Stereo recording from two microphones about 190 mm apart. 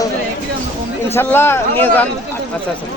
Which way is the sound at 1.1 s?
10° left (ahead or behind).